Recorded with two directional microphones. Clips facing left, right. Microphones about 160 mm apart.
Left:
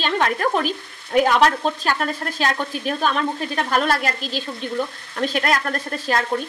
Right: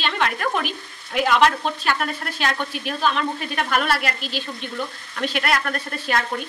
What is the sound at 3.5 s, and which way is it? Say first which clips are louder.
Speech: left 2 dB; 35° left (ahead or behind).